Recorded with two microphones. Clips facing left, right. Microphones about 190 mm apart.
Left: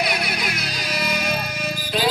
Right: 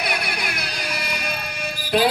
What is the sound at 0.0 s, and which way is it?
Music, 55° right (ahead or behind).